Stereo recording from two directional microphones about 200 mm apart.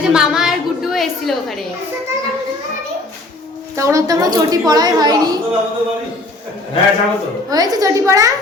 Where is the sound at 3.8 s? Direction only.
15° right (ahead or behind).